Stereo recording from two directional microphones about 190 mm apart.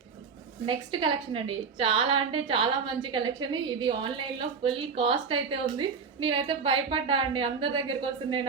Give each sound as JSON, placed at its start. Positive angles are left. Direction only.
{"t": 0.6, "sound": "a woman's voice", "side_deg": -25}